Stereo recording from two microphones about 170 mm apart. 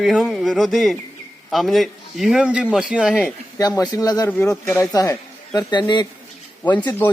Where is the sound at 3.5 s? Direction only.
20° left (ahead or behind).